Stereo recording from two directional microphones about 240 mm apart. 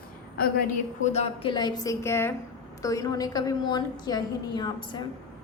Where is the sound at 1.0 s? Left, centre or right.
Left.